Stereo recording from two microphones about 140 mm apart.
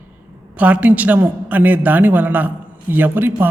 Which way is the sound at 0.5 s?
10° right (ahead or behind).